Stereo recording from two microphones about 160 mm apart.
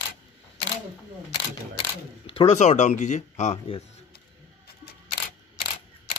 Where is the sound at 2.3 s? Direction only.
35° left (ahead or behind).